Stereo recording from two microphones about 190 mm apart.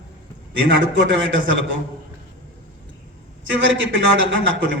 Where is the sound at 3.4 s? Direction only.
75° right (ahead or behind).